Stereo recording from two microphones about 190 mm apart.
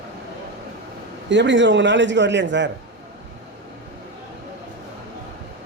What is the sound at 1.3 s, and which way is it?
A man's voice, 70° right (ahead or behind).